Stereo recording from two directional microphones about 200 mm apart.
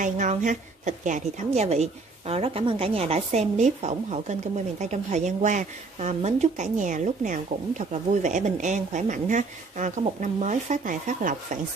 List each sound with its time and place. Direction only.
0.0 s a woman's voice: 40° right (ahead or behind)